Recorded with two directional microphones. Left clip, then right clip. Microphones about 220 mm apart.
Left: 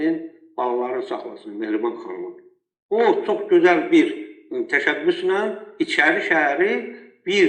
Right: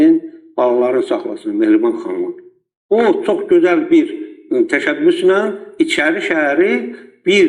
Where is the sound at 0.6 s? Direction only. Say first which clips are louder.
Right 10 dB; 40° right (ahead or behind).